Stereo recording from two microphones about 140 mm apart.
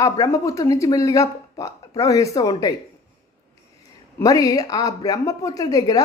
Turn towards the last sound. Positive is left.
turn(degrees=25)  # may be behind; listen again after turning